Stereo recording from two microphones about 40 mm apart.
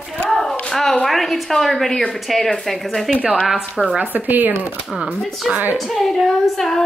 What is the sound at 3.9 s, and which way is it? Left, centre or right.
Speech, right.